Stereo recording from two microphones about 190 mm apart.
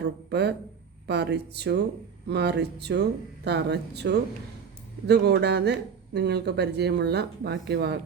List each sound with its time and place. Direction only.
0.0 s speech: 60° right (ahead or behind)